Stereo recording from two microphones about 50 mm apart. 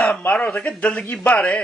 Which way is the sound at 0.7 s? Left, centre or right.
Left.